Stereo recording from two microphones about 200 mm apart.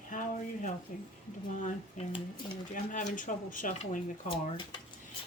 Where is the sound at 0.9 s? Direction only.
40° left (ahead or behind).